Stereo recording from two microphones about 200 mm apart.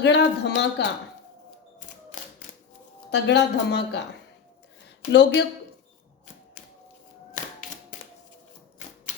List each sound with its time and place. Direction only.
0.0 s speech: 60° left (ahead or behind)
3.1 s speech: 60° left (ahead or behind)
5.1 s speech: 60° left (ahead or behind)